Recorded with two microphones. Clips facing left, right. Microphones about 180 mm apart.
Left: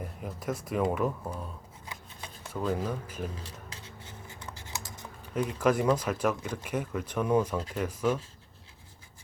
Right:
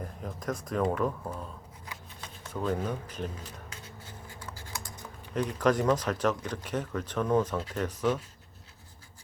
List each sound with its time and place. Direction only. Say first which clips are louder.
0.0 s speech: even; 5° left (ahead or behind)
2.5 s speech: even; 5° left (ahead or behind)
3.4 s a sound: even; 30° left (ahead or behind)
5.3 s speech: even; 5° left (ahead or behind)